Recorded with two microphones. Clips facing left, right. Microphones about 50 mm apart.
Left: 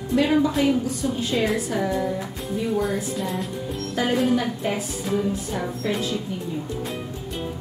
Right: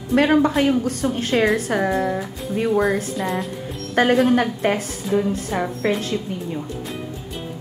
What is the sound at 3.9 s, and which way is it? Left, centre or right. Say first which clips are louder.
A woman's voice: right 6 dB; right.